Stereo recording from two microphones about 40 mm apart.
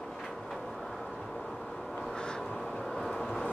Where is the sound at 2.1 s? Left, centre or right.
Centre.